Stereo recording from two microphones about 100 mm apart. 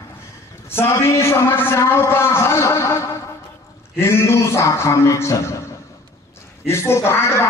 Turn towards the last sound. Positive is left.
turn(degrees=25)  # may be behind; listen again after turning